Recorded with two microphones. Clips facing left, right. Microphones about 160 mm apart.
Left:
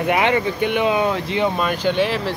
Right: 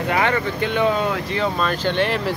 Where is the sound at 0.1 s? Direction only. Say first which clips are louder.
Left 2 dB; 20° left (ahead or behind).